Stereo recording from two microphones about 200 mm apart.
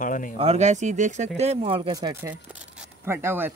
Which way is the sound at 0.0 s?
40° left (ahead or behind).